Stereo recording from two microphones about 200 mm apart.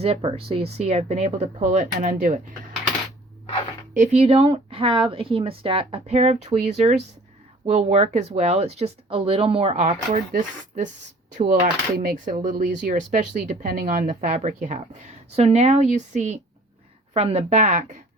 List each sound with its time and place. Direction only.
0.3 s speech: 30° right (ahead or behind)
3.9 s a woman's voice: 35° right (ahead or behind)
11.3 s speech: 45° right (ahead or behind)